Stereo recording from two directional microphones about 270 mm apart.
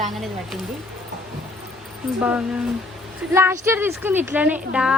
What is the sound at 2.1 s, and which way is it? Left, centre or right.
A woman's voice, centre.